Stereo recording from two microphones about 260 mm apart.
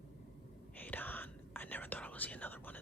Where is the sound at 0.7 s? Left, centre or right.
Centre.